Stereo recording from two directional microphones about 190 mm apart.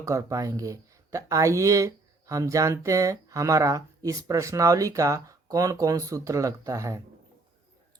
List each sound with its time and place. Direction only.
0.0 s speech: 15° right (ahead or behind)